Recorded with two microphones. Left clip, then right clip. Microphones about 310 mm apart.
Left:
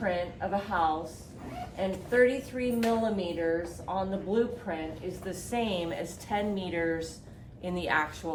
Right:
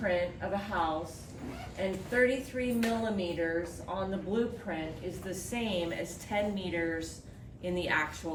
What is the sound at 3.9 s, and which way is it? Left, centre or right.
A woman's voice, centre.